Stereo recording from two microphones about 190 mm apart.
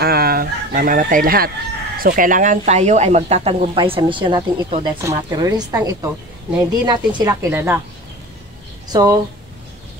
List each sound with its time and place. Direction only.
0.0 s chicken: 55° right (ahead or behind)
2.0 s a woman's voice: 50° right (ahead or behind); by 7.8 s 10° right (ahead or behind)
8.8 s speech: 20° right (ahead or behind)